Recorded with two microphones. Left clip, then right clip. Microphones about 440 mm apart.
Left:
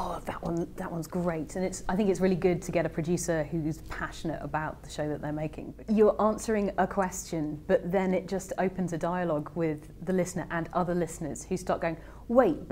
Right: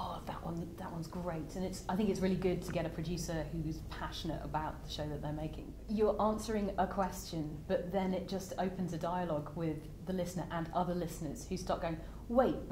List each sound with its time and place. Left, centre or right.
0.0 s a woman's voice: left
3.1 s a woman's voice: left
3.9 s a woman's voice: left